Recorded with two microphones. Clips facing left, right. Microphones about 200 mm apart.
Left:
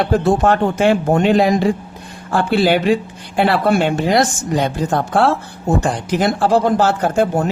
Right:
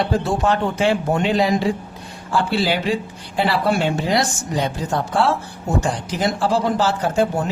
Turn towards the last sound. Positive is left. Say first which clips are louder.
# left 3 dB
turn(degrees=55)  # may be behind; listen again after turning